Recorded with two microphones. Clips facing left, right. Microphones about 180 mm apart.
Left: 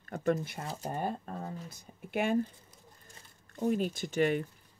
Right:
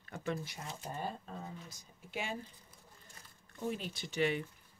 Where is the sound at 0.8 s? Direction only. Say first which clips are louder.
Left 6 dB; 55° left (ahead or behind).